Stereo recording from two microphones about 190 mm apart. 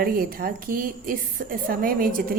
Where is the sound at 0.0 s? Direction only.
50° right (ahead or behind).